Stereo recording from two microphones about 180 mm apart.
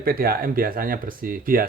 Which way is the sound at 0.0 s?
55° right (ahead or behind).